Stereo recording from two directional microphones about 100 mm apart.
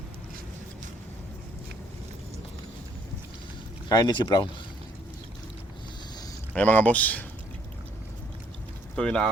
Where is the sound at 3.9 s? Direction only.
45° left (ahead or behind).